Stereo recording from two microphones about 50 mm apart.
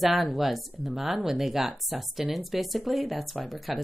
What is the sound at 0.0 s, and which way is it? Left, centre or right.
Speech, centre.